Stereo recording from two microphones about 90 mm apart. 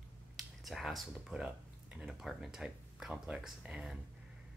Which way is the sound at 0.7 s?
Centre (ahead or behind).